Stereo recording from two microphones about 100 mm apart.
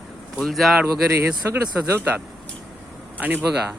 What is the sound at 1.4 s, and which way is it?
Speech, 25° right (ahead or behind).